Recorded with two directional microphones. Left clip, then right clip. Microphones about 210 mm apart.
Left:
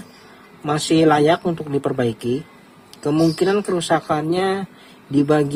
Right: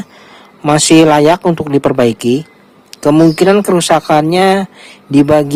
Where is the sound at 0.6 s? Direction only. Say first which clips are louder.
Right 9 dB; 35° right (ahead or behind).